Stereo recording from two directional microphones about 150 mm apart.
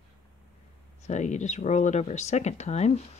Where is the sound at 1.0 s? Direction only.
50° left (ahead or behind).